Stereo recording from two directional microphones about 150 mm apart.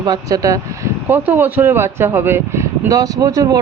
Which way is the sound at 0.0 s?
25° right (ahead or behind).